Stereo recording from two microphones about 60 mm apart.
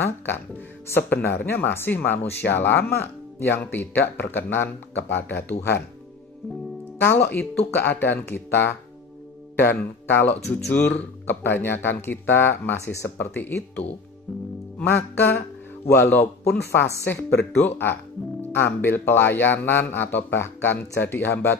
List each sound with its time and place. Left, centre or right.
0.9 s speech: left
7.0 s speech: left
13.2 s speech: left
14.9 s speech: left